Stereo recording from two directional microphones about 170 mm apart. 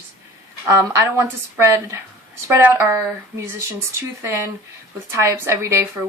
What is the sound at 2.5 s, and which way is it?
A woman's voice, 15° right (ahead or behind).